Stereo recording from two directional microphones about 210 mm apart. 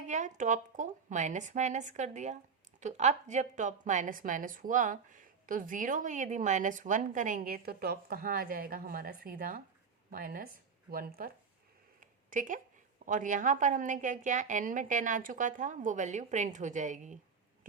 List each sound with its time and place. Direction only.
0.1 s a woman's voice: 35° right (ahead or behind)
11.9 s a sound: 40° right (ahead or behind)
13.1 s a woman's voice: 35° right (ahead or behind)